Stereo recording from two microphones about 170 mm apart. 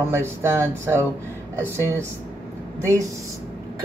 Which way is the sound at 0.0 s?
15° right (ahead or behind).